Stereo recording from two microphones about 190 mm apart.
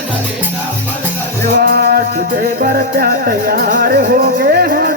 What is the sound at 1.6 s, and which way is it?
Music, 60° right (ahead or behind).